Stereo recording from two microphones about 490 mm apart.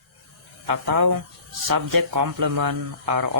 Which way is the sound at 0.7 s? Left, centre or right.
Right.